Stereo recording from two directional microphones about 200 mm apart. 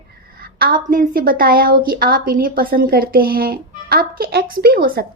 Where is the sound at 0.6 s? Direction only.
45° right (ahead or behind).